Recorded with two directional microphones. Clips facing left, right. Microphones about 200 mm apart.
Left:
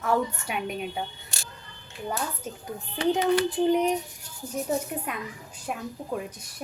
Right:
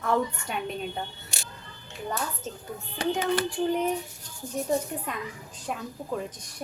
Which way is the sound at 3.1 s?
20° left (ahead or behind).